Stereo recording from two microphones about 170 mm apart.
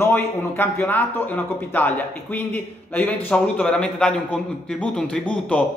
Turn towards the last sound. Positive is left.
turn(degrees=5)  # may be behind; listen again after turning